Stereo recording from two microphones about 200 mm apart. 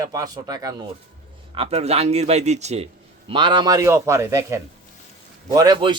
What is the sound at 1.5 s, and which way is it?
A man's voice, 30° right (ahead or behind).